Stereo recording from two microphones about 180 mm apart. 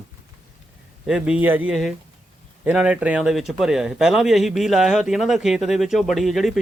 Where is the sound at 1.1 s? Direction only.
5° right (ahead or behind).